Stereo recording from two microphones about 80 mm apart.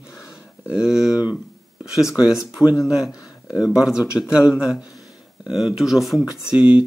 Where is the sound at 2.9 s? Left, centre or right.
Centre.